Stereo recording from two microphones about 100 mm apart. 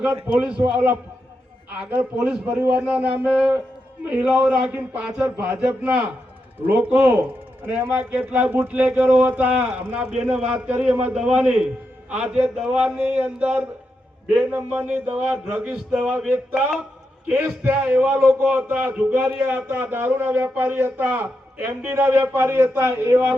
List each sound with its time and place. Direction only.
0.3 s a man's voice: 10° right (ahead or behind)
18.5 s a man's voice: 20° right (ahead or behind)